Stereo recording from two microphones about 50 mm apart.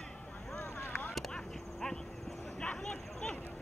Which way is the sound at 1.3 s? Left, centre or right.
Centre.